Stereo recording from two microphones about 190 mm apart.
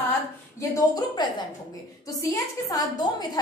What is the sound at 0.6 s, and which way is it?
A woman's voice, 20° left (ahead or behind).